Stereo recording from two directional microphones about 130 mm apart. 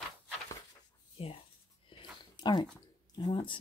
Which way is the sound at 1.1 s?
45° left (ahead or behind).